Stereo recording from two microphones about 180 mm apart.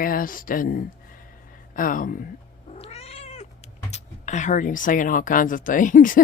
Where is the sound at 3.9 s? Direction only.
40° left (ahead or behind).